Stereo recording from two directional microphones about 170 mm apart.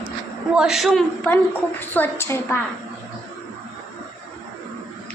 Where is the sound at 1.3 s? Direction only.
10° left (ahead or behind).